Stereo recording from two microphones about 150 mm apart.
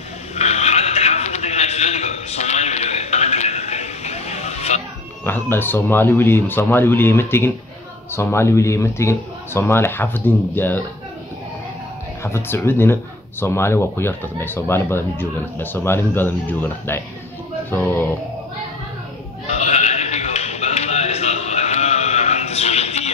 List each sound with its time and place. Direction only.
0.4 s a sound: 45° left (ahead or behind)
5.2 s speech: 15° left (ahead or behind)
12.2 s speech: 15° left (ahead or behind)
19.4 s sheep: 50° left (ahead or behind)